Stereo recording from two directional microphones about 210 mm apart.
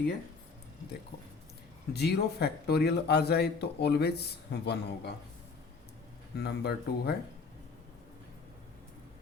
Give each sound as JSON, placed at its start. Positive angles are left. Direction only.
{"t": 1.9, "sound": "a man's voice", "side_deg": 50}
{"t": 6.3, "sound": "a man's voice", "side_deg": 50}